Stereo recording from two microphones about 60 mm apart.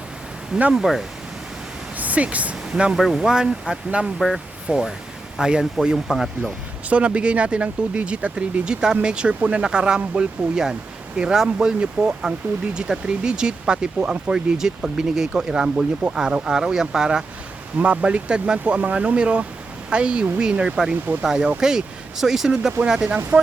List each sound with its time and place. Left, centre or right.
0.7 s speech: centre
2.0 s speech: right
6.1 s speech: centre
6.9 s speech: centre